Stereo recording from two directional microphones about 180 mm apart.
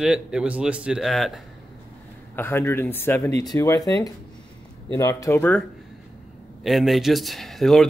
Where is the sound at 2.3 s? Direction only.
10° left (ahead or behind).